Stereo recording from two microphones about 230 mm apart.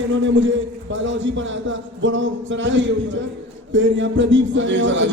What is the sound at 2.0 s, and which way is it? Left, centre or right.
A man's voice, right.